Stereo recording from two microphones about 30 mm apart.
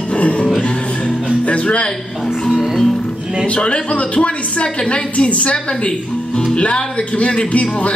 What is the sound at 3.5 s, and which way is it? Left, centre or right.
A man's voice, left.